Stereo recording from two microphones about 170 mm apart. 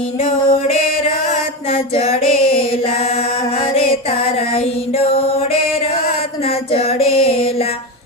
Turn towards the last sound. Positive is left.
turn(degrees=35)  # may be behind; listen again after turning